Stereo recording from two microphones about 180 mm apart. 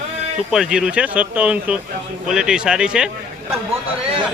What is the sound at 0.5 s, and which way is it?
A man's voice, 5° right (ahead or behind).